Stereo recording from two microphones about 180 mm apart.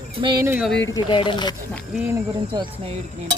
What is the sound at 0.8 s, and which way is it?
Speech, 25° left (ahead or behind).